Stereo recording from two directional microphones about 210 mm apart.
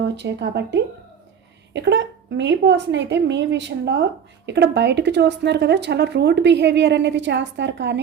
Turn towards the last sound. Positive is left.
turn(degrees=-55)  # may be behind; listen again after turning